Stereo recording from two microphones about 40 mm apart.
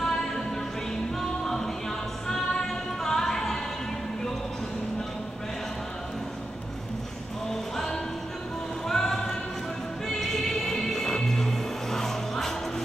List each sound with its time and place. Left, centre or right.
1.4 s music: centre
7.7 s music: centre
8.8 s a sound: centre
10.0 s music: centre